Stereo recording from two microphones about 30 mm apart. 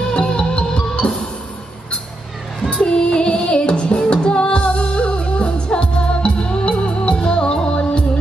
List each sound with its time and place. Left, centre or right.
0.1 s music: left
2.7 s music: left